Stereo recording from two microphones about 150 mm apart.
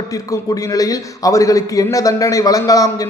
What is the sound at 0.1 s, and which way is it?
A man's voice, 20° left (ahead or behind).